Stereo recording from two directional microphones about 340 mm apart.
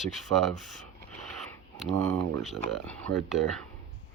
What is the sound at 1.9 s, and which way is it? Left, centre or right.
Speech, right.